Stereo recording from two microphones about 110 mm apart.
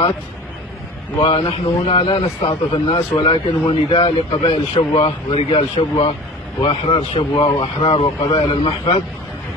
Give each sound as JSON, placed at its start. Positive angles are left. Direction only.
{"t": 1.2, "sound": "a man's voice", "side_deg": 60}